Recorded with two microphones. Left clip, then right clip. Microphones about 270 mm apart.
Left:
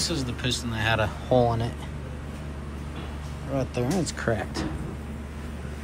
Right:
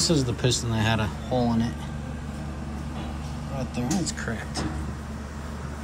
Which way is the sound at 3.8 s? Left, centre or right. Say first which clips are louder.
Left 1 dB; centre.